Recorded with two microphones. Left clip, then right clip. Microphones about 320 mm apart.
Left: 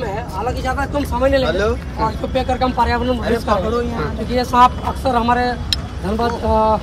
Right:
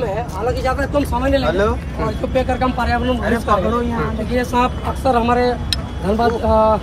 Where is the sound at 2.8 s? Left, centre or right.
Centre.